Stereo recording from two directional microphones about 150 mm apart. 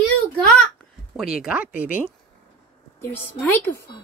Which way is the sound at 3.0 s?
15° left (ahead or behind).